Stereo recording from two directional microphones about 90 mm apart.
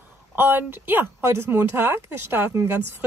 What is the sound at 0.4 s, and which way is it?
Speech, 25° right (ahead or behind).